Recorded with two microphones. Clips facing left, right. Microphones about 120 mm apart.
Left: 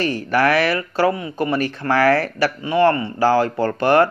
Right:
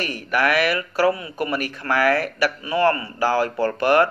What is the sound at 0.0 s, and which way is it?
Speech, 30° left (ahead or behind).